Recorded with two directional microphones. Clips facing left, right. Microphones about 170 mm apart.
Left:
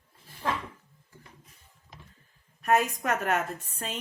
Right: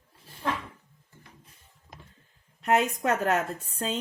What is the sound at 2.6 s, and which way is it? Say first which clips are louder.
Speech: right 1 dB; 25° right (ahead or behind).